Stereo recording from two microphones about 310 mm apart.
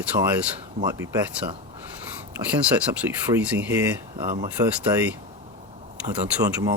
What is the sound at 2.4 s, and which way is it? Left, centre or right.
Speech, centre.